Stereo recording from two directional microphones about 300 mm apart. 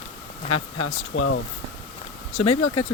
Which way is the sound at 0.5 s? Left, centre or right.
Left.